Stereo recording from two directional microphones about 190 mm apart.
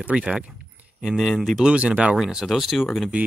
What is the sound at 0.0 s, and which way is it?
Speech, 5° right (ahead or behind).